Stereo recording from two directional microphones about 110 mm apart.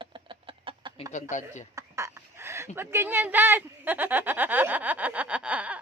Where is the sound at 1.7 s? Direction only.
25° right (ahead or behind).